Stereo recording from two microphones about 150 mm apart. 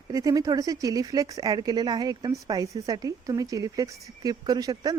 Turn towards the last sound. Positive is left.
turn(degrees=-25)  # may be behind; listen again after turning